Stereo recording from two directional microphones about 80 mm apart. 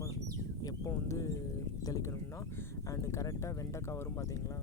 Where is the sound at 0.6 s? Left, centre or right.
Left.